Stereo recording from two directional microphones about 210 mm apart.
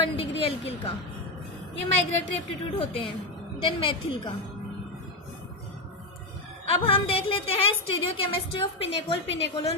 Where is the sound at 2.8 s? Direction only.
25° left (ahead or behind).